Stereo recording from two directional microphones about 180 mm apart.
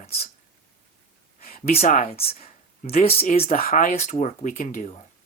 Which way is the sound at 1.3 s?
50° left (ahead or behind).